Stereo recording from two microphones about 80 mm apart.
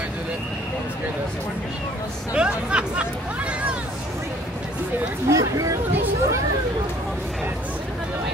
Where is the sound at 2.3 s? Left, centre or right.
Centre.